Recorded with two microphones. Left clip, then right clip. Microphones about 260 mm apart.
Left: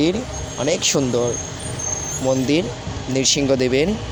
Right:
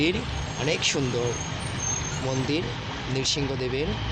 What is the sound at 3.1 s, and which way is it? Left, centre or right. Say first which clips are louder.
Speech: left 10 dB; left.